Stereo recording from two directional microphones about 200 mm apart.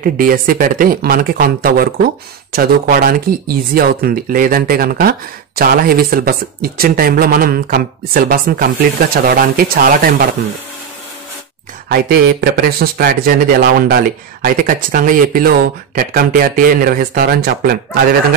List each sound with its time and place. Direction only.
0.0 s a man's voice: 45° right (ahead or behind)
11.9 s a man's voice: 50° right (ahead or behind)